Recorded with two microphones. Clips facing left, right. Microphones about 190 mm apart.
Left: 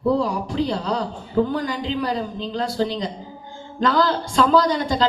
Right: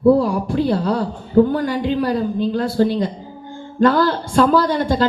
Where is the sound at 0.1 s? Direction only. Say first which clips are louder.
Right 6 dB; 50° right (ahead or behind).